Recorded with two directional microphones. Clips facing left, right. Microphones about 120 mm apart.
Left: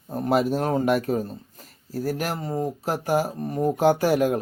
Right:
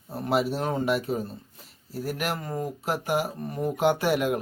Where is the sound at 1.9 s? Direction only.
35° left (ahead or behind).